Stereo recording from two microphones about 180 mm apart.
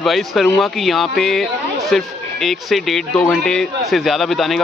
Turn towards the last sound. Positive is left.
turn(degrees=0)  # may be behind; listen again after turning